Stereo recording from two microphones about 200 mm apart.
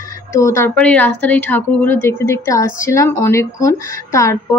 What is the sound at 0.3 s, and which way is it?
A woman's voice, 15° left (ahead or behind).